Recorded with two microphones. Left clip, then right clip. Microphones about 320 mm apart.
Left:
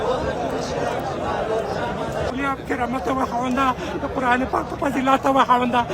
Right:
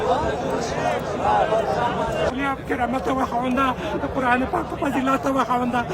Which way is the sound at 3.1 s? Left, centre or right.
Centre.